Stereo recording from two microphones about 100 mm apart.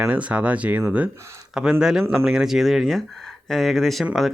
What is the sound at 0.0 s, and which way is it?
Speech, 10° right (ahead or behind).